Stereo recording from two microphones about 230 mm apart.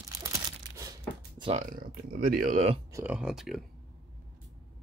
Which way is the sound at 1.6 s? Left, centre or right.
Right.